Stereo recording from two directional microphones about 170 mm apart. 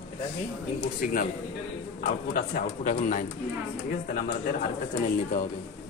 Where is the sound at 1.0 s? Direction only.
55° left (ahead or behind).